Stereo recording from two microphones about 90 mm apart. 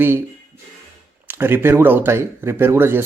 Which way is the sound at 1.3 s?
25° right (ahead or behind).